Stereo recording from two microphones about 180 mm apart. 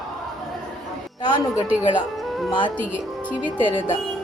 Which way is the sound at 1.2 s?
25° left (ahead or behind).